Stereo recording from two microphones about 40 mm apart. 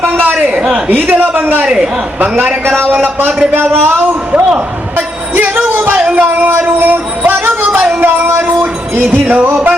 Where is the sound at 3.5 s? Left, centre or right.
Right.